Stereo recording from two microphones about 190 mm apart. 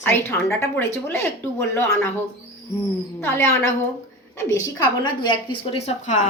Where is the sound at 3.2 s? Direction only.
15° left (ahead or behind); by 6.3 s 40° left (ahead or behind).